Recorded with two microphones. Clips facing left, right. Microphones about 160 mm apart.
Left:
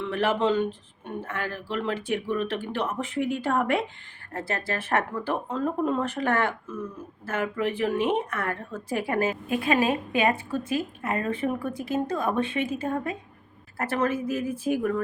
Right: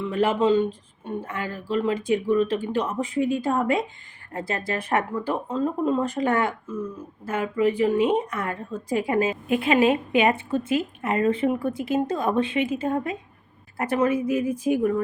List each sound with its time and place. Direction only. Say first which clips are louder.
0.0 s a woman's voice: right 3 dB; 10° right (ahead or behind)